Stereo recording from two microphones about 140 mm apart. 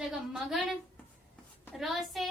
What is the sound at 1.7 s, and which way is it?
Speech, centre (ahead or behind).